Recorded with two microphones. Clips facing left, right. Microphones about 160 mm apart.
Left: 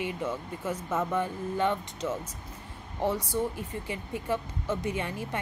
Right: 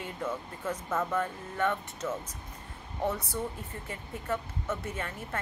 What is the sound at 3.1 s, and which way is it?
Speech, 10° left (ahead or behind).